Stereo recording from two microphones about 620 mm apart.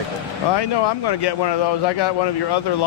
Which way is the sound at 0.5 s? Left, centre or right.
Left.